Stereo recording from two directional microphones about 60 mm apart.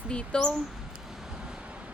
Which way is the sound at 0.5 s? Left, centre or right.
Centre.